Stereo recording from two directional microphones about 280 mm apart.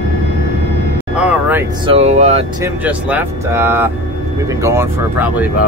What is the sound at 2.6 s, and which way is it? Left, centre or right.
Speech, centre.